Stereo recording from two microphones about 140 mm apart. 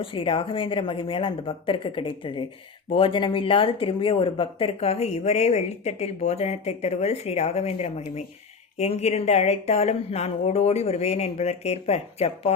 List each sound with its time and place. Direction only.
0.0 s speech: 40° left (ahead or behind)